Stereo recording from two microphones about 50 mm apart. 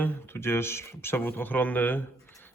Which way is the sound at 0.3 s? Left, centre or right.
Left.